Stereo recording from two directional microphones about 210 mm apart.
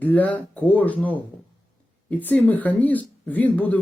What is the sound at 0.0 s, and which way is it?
Speech, 10° left (ahead or behind).